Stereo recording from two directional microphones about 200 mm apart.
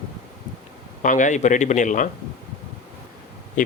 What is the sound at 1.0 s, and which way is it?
Speech, 40° left (ahead or behind).